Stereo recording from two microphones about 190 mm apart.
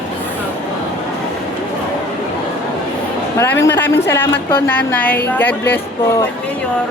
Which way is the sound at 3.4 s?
10° left (ahead or behind).